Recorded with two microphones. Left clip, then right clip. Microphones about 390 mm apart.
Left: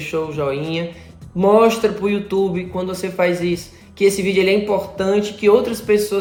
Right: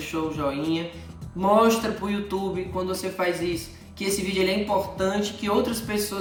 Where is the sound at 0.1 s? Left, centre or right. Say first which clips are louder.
Left 6 dB; left.